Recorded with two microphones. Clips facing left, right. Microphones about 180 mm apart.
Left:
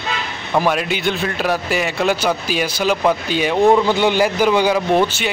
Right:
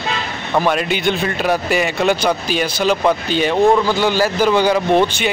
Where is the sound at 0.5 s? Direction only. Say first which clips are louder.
Right 1 dB; 5° left (ahead or behind).